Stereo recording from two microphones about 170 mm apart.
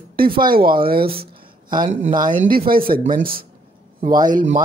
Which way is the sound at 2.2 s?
55° right (ahead or behind).